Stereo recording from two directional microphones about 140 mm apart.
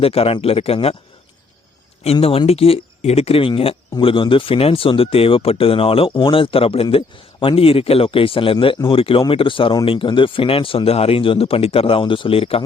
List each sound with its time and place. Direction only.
0.0 s speech: 45° left (ahead or behind)
2.5 s speech: 45° left (ahead or behind)